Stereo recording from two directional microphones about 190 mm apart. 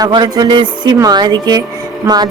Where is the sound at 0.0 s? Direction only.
20° right (ahead or behind).